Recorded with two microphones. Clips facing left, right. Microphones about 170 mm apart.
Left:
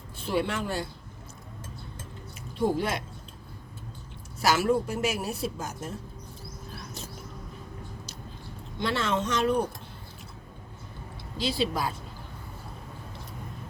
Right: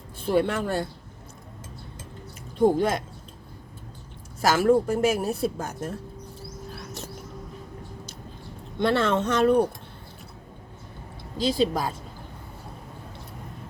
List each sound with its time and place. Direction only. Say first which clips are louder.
0.3 s a woman's voice: right 5 dB; 50° right (ahead or behind)
2.6 s a woman's voice: right 6 dB; 50° right (ahead or behind)
4.4 s a woman's voice: right 4 dB; 50° right (ahead or behind)
8.8 s speech: right 6 dB; 55° right (ahead or behind)
11.3 s a woman's voice: right 5 dB; 45° right (ahead or behind)